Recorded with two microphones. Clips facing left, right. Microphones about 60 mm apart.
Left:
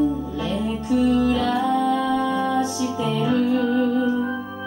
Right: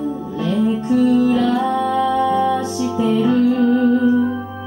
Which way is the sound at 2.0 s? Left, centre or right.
Right.